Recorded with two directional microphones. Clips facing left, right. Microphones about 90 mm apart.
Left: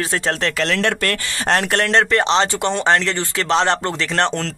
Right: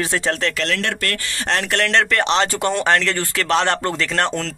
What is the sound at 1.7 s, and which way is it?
Speech, 30° left (ahead or behind).